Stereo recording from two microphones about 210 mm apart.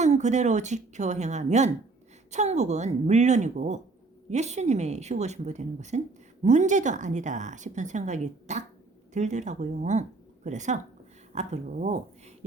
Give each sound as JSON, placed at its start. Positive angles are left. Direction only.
{"t": 0.0, "sound": "a woman's voice", "side_deg": -35}